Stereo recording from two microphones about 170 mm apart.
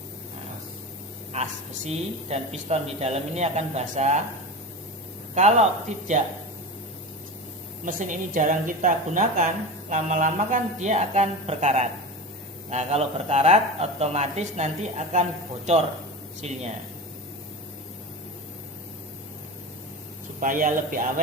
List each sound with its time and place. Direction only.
1.3 s speech: 40° right (ahead or behind)
5.3 s speech: 40° right (ahead or behind)
7.9 s speech: 50° right (ahead or behind)
20.4 s speech: 50° right (ahead or behind)